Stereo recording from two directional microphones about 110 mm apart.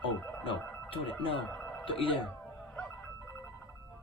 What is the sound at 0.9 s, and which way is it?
Speech, 55° left (ahead or behind).